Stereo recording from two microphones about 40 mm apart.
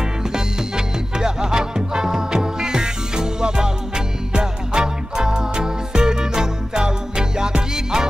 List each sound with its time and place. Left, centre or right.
0.3 s music: centre